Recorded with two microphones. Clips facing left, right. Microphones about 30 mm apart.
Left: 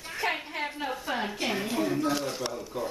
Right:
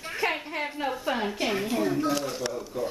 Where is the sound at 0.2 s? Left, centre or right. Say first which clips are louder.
Right 2 dB; centre.